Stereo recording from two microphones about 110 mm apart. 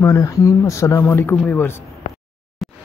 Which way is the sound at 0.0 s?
25° left (ahead or behind).